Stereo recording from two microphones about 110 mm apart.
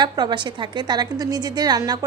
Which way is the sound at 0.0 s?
45° right (ahead or behind).